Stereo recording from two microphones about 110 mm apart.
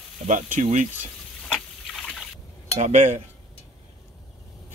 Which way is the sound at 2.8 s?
90° right.